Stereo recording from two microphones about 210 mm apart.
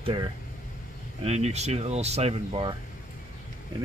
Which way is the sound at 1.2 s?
30° right (ahead or behind).